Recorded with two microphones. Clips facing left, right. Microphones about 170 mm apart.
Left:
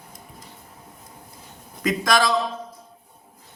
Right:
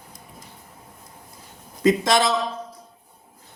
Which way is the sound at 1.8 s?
25° right (ahead or behind).